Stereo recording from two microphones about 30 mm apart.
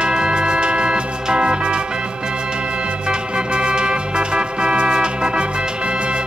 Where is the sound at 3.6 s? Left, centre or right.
Right.